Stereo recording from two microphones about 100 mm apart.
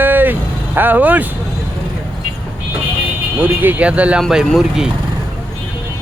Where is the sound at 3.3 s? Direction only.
20° right (ahead or behind).